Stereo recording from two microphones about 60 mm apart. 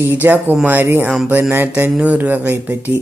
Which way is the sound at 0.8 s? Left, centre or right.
Right.